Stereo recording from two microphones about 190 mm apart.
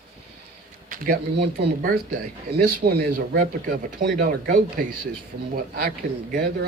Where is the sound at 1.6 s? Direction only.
45° right (ahead or behind).